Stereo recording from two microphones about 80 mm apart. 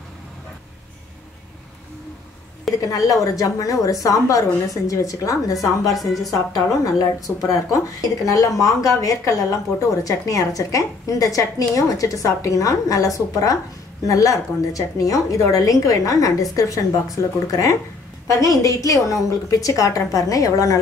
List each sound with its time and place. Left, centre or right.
2.9 s a woman's voice: left
5.6 s a woman's voice: centre
6.7 s a woman's voice: left